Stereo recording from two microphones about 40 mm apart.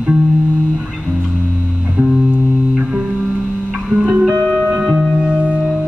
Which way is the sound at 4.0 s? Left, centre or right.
Right.